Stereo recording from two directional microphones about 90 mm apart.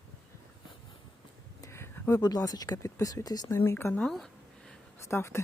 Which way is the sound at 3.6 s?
25° left (ahead or behind).